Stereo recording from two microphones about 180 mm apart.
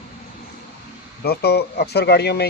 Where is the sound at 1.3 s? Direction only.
60° left (ahead or behind).